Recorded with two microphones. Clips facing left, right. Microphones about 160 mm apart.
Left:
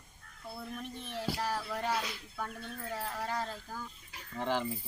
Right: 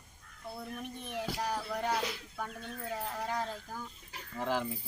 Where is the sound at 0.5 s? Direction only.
15° right (ahead or behind).